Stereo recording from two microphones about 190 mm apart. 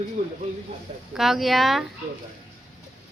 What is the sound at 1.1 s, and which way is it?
Speech, centre (ahead or behind).